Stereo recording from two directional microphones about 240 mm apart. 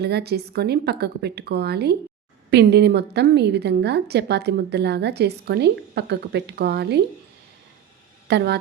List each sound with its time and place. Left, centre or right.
0.0 s a woman's voice: right
8.3 s speech: right